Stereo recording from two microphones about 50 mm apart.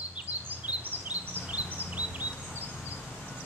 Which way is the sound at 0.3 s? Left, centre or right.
Right.